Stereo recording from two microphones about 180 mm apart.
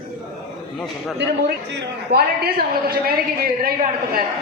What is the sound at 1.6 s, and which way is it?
A man's voice, 65° right (ahead or behind).